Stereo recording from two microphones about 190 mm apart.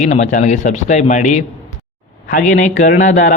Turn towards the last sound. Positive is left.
turn(degrees=40)  # may be behind; listen again after turning